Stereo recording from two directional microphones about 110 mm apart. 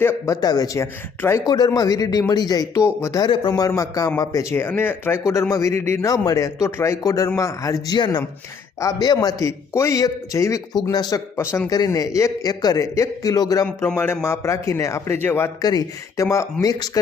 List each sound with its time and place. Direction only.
0.0 s speech: 20° left (ahead or behind)
0.4 s a man's voice: 35° left (ahead or behind)
3.2 s a man's voice: 45° left (ahead or behind)
7.9 s a man's voice: 45° left (ahead or behind)
13.7 s speech: 20° left (ahead or behind)
15.6 s a man's voice: 30° left (ahead or behind)